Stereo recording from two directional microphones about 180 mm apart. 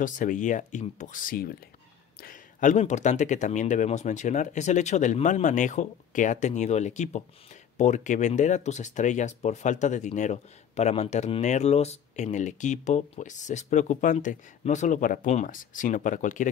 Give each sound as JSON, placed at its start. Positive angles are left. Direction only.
{"t": 0.0, "sound": "speech", "side_deg": 45}